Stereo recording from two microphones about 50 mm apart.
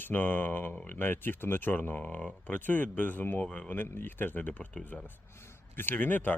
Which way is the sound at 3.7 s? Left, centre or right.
Left.